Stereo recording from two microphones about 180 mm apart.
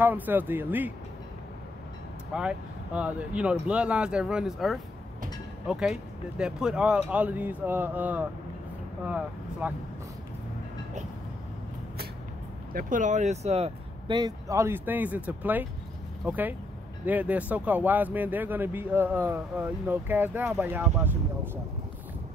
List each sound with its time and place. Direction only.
0.0 s speech: 10° right (ahead or behind)
2.3 s speech: 5° right (ahead or behind)
12.7 s speech: 45° right (ahead or behind); by 21.2 s 10° right (ahead or behind)